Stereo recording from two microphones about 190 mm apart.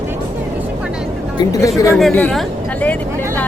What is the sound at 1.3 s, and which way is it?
Speech, 20° left (ahead or behind).